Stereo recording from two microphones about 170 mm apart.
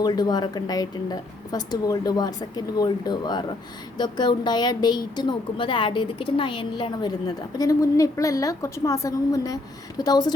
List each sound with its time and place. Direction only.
0.0 s a woman's voice: 25° left (ahead or behind)